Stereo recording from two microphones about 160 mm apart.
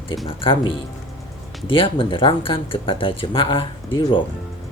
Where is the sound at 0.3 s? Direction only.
35° left (ahead or behind).